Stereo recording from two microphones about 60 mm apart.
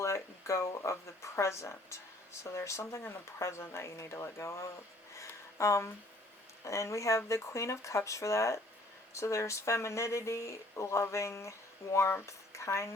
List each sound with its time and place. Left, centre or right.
0.0 s speech: left
5.1 s a sound: left
6.7 s speech: left